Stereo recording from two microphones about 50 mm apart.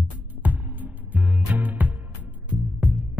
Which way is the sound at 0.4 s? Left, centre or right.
Right.